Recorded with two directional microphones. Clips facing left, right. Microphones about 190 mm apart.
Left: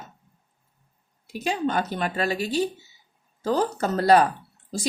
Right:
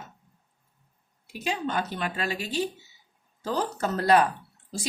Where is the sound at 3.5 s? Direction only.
45° left (ahead or behind).